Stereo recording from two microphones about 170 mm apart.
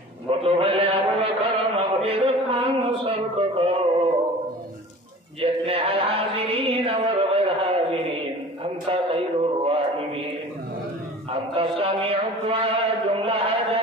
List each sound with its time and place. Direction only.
0.3 s chant: 35° right (ahead or behind)
5.4 s music: 35° right (ahead or behind)
8.6 s mantra: 35° right (ahead or behind)
11.5 s a sound: 35° right (ahead or behind)